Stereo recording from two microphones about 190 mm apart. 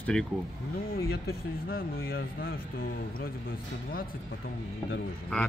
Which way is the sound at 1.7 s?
50° left (ahead or behind).